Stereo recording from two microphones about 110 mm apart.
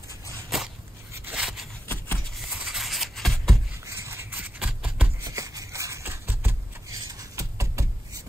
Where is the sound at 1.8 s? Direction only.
15° left (ahead or behind).